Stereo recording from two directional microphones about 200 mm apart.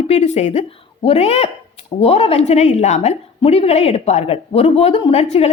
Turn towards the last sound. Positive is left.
turn(degrees=30)  # may be behind; listen again after turning